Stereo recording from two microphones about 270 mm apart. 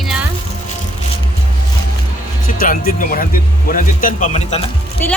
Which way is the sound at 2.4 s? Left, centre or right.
Left.